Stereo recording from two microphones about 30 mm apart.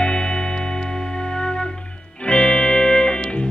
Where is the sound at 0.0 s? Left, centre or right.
Left.